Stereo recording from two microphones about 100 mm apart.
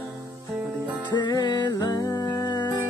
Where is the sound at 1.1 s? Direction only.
45° left (ahead or behind).